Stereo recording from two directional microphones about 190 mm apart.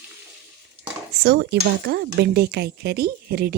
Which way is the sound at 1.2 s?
60° right (ahead or behind).